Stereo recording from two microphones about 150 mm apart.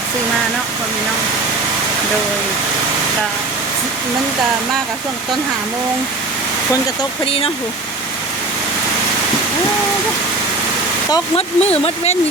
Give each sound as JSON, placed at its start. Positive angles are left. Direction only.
{"t": 7.3, "sound": "speech", "side_deg": 40}
{"t": 11.3, "sound": "speech", "side_deg": 40}